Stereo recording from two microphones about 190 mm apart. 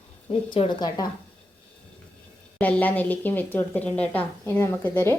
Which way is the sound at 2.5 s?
5° left (ahead or behind).